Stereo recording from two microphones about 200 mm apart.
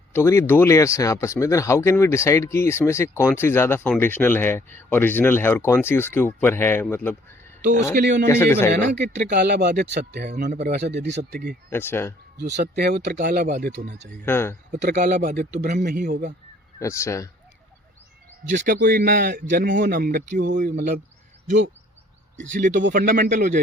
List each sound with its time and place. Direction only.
0.1 s speech: 15° left (ahead or behind)
7.9 s speech: 55° right (ahead or behind)
8.3 s speech: 10° left (ahead or behind)
8.7 s speech: 60° right (ahead or behind)
11.7 s speech: 10° left (ahead or behind)
12.5 s speech: 55° right (ahead or behind)
14.2 s speech: 10° left (ahead or behind)
15.0 s speech: 55° right (ahead or behind)
16.8 s speech: 15° left (ahead or behind)
18.4 s speech: 40° right (ahead or behind)
22.5 s speech: 40° right (ahead or behind)